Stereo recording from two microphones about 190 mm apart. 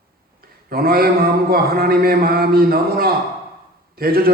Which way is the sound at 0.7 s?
50° right (ahead or behind).